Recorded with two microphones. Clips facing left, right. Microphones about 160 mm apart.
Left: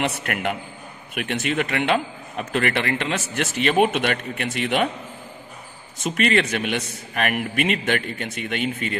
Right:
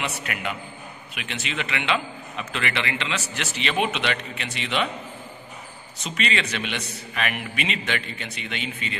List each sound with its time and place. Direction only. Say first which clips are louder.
0.0 s a man's voice: left 5 dB; 55° left (ahead or behind)
5.9 s a man's voice: left 7 dB; 50° left (ahead or behind)